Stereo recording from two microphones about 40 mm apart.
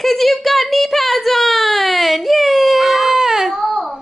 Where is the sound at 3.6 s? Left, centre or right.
Centre.